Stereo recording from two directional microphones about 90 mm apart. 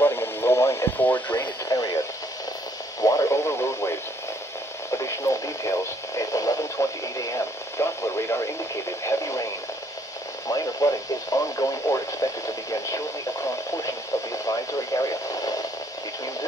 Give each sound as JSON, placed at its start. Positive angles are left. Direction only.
{"t": 0.0, "sound": "radio", "side_deg": 25}
{"t": 1.7, "sound": "radio", "side_deg": 45}
{"t": 3.0, "sound": "radio", "side_deg": 40}
{"t": 4.9, "sound": "radio", "side_deg": 35}
{"t": 10.5, "sound": "radio", "side_deg": 40}